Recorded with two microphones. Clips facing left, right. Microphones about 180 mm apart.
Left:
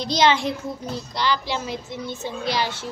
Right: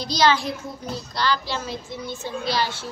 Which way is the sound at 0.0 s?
25° left (ahead or behind).